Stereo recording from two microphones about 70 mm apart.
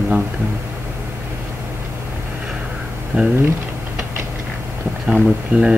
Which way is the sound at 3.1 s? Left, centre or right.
Right.